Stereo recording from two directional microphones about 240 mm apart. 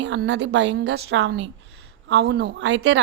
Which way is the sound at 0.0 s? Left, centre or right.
Right.